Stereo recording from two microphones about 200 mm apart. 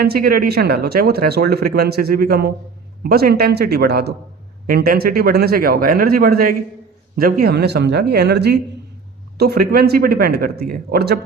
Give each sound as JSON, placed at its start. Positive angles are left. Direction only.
{"t": 0.0, "sound": "speech", "side_deg": -50}